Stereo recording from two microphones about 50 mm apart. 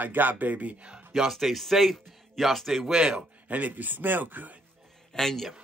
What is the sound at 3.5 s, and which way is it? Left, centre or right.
A man's voice, right.